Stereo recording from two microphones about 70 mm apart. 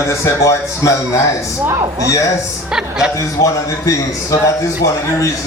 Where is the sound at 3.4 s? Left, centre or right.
Left.